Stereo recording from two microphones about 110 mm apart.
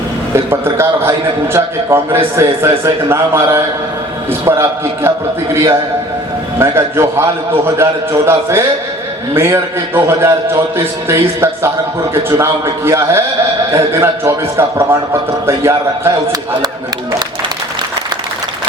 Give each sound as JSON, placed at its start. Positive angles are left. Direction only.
{"t": 0.3, "sound": "a man's voice", "side_deg": -20}
{"t": 6.6, "sound": "a man's voice", "side_deg": -25}